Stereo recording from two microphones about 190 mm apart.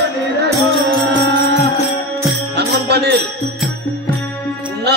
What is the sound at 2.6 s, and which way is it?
Music, 60° right (ahead or behind).